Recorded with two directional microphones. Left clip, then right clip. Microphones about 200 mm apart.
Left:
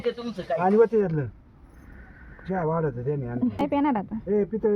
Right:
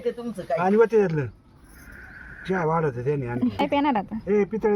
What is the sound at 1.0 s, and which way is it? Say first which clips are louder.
Speech: right 3 dB; 35° right (ahead or behind).